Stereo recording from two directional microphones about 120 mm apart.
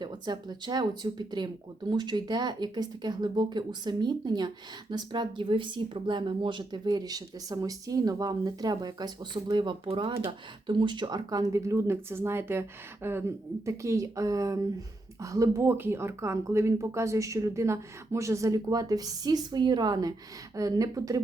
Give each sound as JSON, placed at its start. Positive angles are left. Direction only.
{"t": 0.0, "sound": "speech", "side_deg": -35}